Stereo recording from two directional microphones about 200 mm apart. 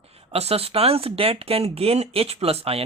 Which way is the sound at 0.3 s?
30° right (ahead or behind).